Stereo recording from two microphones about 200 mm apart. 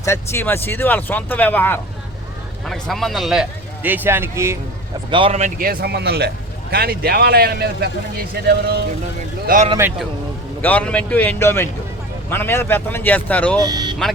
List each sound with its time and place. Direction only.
0.0 s a man's voice: 15° left (ahead or behind); by 4.5 s 10° right (ahead or behind)
5.1 s a man's voice: 30° right (ahead or behind); by 8.8 s 50° right (ahead or behind)
9.6 s speech: 15° right (ahead or behind)
10.6 s speech: 5° left (ahead or behind)
13.6 s speech: 20° right (ahead or behind)